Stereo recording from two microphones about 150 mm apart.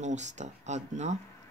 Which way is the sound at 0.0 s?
50° right (ahead or behind).